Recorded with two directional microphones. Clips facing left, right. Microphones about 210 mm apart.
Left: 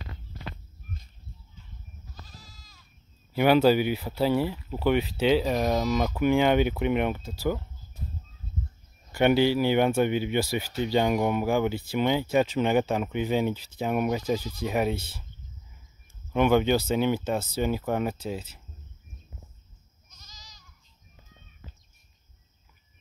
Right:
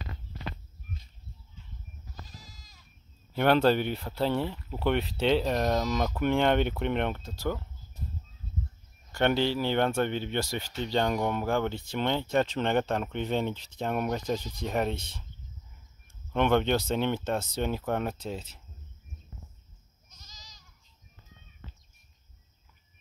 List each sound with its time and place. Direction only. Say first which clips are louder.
2.3 s goat: even; 15° right (ahead or behind)
3.3 s speech: left 3 dB; 5° left (ahead or behind)
9.1 s speech: left 5 dB; 10° left (ahead or behind)
16.3 s speech: left 3 dB; 5° left (ahead or behind)